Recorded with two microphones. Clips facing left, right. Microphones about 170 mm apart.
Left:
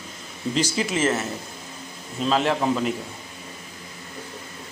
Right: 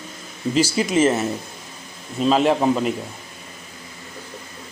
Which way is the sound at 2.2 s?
15° right (ahead or behind).